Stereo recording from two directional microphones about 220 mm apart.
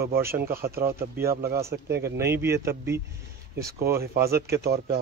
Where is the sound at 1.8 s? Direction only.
50° right (ahead or behind).